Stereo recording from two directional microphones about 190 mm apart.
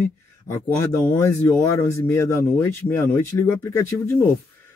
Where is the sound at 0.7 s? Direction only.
15° left (ahead or behind).